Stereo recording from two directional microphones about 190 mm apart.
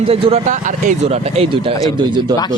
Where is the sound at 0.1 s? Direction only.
35° right (ahead or behind).